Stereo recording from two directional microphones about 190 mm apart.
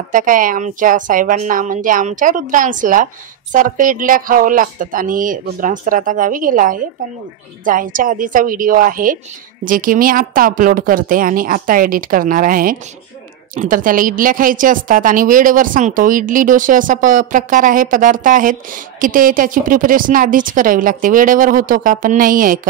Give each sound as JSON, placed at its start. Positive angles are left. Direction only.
{"t": 0.1, "sound": "a woman's voice", "side_deg": -45}